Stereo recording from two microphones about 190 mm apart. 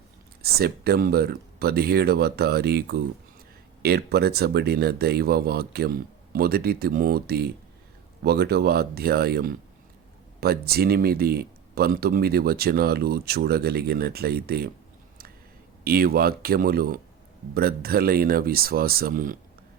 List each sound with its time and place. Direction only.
0.4 s speech: 55° right (ahead or behind)
15.8 s speech: 55° right (ahead or behind)